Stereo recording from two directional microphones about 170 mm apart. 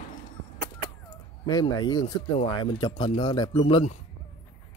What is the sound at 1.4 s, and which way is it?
Speech, 25° left (ahead or behind).